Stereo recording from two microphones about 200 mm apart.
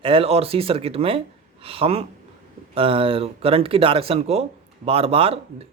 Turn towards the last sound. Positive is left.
turn(degrees=-30)  # may be behind; listen again after turning